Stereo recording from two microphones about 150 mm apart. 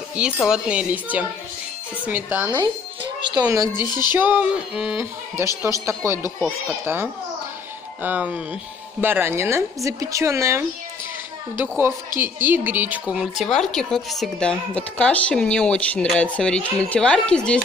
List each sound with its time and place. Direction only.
0.1 s speech: 5° right (ahead or behind)
3.2 s a woman's voice: 30° right (ahead or behind)
3.8 s music: 25° left (ahead or behind)
4.1 s speech: 15° right (ahead or behind)
11.6 s speech: 15° right (ahead or behind); by 17.6 s 5° left (ahead or behind)